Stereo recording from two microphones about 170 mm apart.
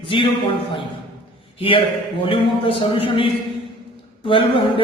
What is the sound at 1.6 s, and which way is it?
A man's voice, 30° left (ahead or behind).